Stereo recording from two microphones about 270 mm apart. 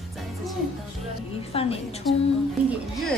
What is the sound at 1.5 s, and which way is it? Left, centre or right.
Speech, left.